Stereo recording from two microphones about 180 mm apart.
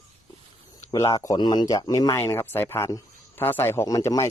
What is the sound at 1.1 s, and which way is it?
A man's voice, 20° left (ahead or behind).